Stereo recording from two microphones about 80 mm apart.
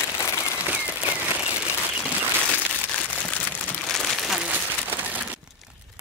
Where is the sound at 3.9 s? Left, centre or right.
Centre.